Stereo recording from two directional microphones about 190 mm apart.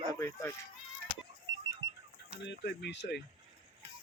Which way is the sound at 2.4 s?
60° left (ahead or behind).